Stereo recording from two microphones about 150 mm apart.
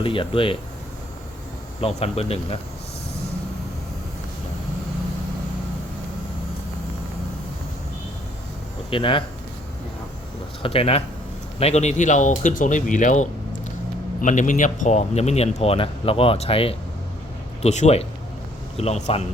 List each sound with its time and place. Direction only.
0.0 s speech: 35° left (ahead or behind)
1.8 s speech: 45° left (ahead or behind)
8.9 s speech: 35° left (ahead or behind)
10.6 s speech: 40° left (ahead or behind)